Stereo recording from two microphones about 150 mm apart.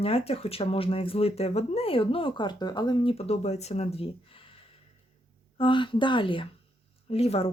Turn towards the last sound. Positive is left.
turn(degrees=40)  # may be behind; listen again after turning